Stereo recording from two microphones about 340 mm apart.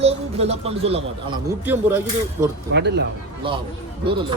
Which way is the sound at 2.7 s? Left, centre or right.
Right.